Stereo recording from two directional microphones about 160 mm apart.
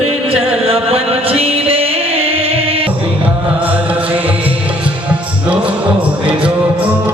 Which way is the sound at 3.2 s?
10° right (ahead or behind).